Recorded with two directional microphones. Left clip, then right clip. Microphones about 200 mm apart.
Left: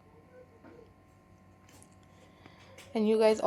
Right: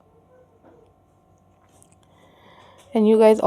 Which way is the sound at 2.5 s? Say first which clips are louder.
Right 12 dB; 50° right (ahead or behind).